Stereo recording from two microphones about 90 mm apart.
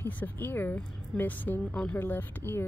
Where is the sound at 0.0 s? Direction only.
20° left (ahead or behind).